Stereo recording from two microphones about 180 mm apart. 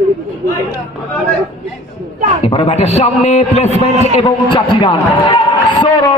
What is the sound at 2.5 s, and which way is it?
A man's voice, 35° left (ahead or behind).